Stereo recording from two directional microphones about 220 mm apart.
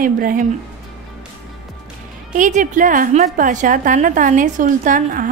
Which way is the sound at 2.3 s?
35° right (ahead or behind).